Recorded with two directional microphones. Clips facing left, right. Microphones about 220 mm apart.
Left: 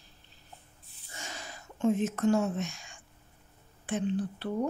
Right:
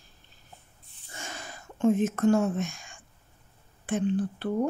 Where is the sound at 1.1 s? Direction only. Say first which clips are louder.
Right 3 dB; 50° right (ahead or behind).